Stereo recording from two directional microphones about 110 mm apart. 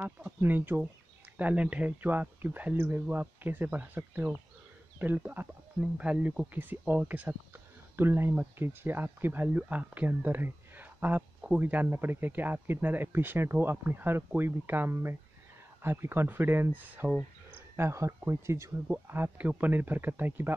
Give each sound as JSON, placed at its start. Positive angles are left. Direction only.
{"t": 0.0, "sound": "speech", "side_deg": -15}
{"t": 17.7, "sound": "speech", "side_deg": -25}